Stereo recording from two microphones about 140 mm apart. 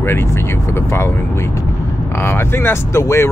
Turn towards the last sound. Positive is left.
turn(degrees=20)  # may be behind; listen again after turning